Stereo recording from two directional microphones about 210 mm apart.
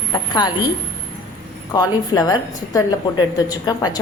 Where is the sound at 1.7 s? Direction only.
20° left (ahead or behind).